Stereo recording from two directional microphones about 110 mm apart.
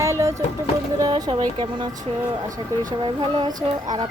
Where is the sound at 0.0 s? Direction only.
30° right (ahead or behind).